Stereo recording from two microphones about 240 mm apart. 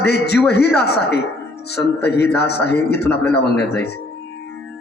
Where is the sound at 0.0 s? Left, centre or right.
Left.